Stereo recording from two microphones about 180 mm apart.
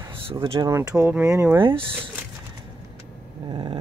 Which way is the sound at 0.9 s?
10° right (ahead or behind).